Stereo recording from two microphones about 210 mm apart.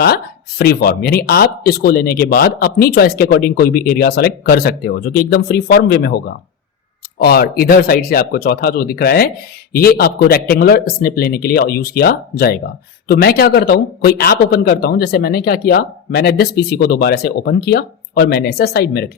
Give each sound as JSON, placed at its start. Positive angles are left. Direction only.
{"t": 0.6, "sound": "speech", "side_deg": 45}